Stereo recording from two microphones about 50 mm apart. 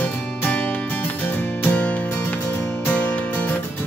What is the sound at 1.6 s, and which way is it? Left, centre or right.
Music, left.